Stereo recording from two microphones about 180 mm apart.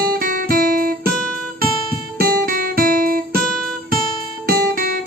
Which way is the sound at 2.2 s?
55° right (ahead or behind).